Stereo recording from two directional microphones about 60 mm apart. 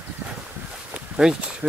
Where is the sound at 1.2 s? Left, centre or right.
Centre.